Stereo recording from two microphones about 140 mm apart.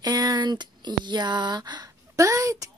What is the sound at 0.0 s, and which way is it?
Speech, 30° right (ahead or behind).